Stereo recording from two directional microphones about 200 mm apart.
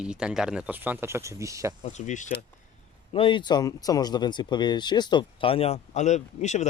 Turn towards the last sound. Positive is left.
turn(degrees=35)  # may be behind; listen again after turning